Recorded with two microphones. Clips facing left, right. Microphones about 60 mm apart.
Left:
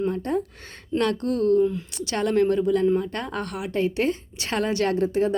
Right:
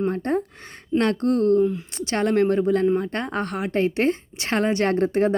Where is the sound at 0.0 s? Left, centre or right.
Right.